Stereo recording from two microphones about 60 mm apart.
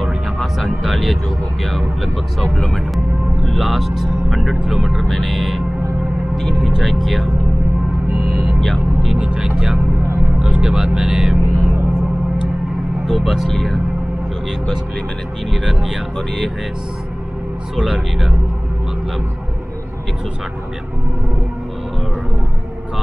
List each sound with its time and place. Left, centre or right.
0.0 s music: centre
0.8 s vehicle: centre
1.6 s speech: centre
5.0 s speech: centre
6.7 s speech: centre
8.5 s speech: centre
9.2 s speech: centre
13.0 s speech: centre
13.5 s speech: centre
15.5 s speech: centre
17.7 s speech: centre